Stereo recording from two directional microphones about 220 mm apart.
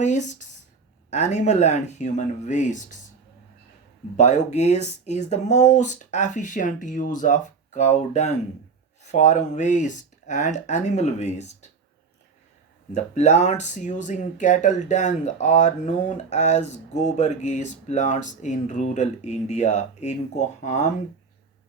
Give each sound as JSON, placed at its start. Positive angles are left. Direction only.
{"t": 0.0, "sound": "speech", "side_deg": 35}
{"t": 4.2, "sound": "speech", "side_deg": 30}
{"t": 12.9, "sound": "speech", "side_deg": 30}